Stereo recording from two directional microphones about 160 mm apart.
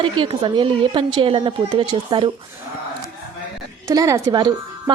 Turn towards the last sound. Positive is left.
turn(degrees=-25)  # may be behind; listen again after turning